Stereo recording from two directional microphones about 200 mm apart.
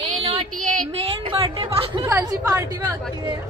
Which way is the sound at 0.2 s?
30° right (ahead or behind).